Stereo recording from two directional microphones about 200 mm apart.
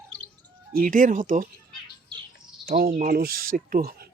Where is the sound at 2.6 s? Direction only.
50° right (ahead or behind).